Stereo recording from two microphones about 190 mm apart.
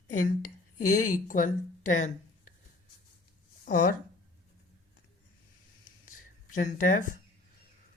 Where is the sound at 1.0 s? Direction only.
45° left (ahead or behind).